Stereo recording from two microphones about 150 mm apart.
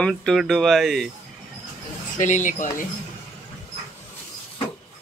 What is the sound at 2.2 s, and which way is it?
Speech, 55° left (ahead or behind).